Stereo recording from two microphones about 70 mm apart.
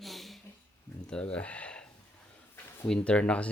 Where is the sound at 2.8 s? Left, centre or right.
Centre.